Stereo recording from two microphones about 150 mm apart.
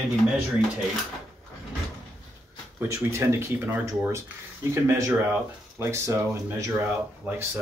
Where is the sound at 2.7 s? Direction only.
20° right (ahead or behind).